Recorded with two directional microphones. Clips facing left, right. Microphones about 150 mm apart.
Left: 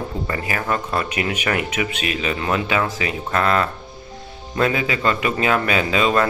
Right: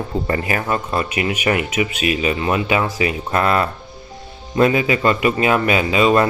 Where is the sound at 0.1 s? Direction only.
30° right (ahead or behind).